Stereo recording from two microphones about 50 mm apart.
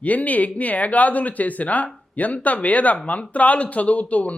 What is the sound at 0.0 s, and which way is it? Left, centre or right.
Speech, left.